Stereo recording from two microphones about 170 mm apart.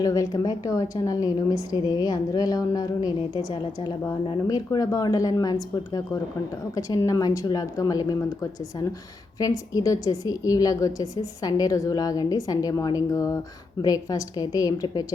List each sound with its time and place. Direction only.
0.0 s a woman's voice: 20° left (ahead or behind)